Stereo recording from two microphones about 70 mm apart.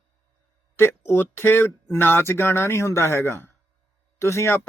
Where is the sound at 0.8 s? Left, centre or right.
Left.